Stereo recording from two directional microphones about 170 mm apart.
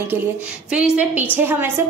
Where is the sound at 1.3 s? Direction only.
15° right (ahead or behind).